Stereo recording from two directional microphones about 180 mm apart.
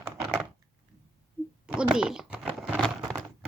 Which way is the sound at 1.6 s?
5° right (ahead or behind).